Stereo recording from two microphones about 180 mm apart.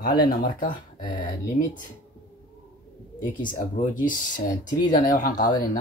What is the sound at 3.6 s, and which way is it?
Speech, 45° left (ahead or behind).